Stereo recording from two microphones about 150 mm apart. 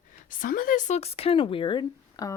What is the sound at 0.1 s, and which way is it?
Speech, 65° left (ahead or behind).